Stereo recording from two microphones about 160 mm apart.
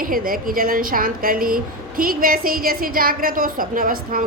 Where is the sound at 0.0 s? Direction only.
60° right (ahead or behind).